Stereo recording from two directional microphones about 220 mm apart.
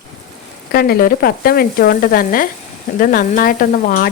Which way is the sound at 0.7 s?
45° left (ahead or behind).